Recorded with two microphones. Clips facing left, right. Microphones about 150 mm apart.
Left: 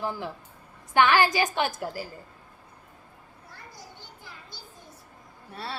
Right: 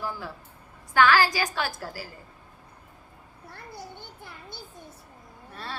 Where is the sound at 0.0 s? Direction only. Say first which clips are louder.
Left 3 dB; 20° left (ahead or behind).